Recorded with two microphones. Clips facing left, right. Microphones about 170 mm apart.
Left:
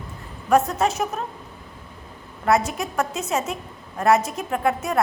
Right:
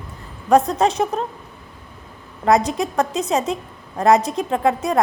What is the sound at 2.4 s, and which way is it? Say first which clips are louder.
A woman's voice: right 4 dB; 35° right (ahead or behind).